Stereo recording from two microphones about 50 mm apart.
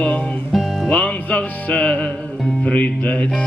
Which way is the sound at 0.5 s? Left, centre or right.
Centre.